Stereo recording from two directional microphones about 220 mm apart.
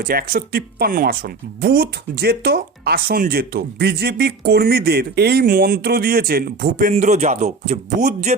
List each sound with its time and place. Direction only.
0.0 s speech: 40° right (ahead or behind)